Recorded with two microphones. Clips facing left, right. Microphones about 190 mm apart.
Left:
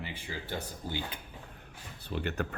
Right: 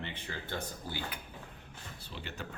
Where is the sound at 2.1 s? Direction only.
55° left (ahead or behind).